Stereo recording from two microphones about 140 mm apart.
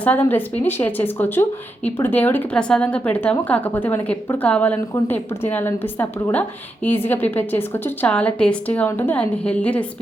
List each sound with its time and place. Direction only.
0.0 s a woman's voice: 10° left (ahead or behind)